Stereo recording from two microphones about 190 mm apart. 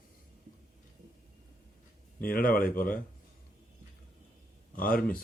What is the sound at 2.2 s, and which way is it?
Speech, 50° left (ahead or behind).